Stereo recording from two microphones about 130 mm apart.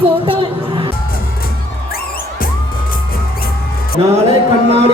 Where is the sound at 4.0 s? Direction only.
40° right (ahead or behind).